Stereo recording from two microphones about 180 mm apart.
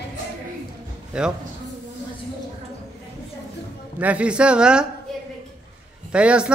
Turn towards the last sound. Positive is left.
turn(degrees=-5)  # may be behind; listen again after turning